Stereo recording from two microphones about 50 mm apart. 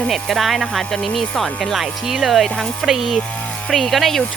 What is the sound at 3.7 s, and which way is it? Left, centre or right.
Speech, centre.